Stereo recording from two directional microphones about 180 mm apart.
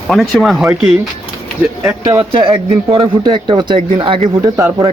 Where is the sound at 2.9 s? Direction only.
30° right (ahead or behind).